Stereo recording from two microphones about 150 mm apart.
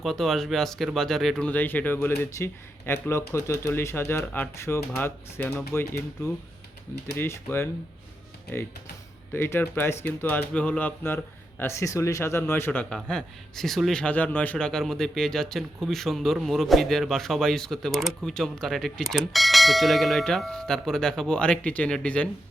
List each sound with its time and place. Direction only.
0.0 s speech: centre (ahead or behind)
7.2 s speech: 15° left (ahead or behind)